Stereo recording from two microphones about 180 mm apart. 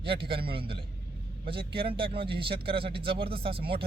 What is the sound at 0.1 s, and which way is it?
Speech, 30° right (ahead or behind).